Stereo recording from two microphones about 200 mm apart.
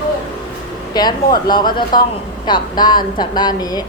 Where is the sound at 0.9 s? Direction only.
20° left (ahead or behind).